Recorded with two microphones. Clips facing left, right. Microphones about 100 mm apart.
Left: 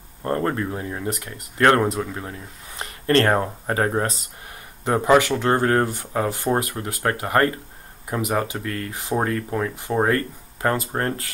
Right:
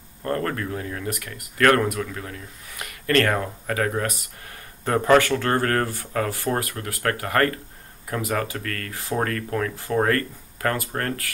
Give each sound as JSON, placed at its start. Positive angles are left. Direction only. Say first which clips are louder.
{"t": 0.2, "sound": "speech", "louder": "left 3 dB", "side_deg": 25}
{"t": 4.8, "sound": "speech", "louder": "left 1 dB", "side_deg": 15}